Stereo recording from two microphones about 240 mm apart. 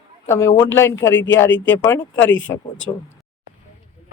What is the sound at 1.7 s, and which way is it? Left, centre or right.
Speech, centre.